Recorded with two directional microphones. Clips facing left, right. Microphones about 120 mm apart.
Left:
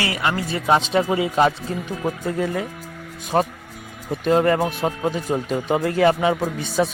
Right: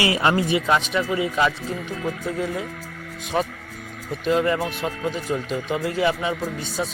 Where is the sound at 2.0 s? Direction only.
55° left (ahead or behind).